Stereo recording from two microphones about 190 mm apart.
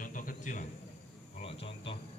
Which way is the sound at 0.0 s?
45° left (ahead or behind).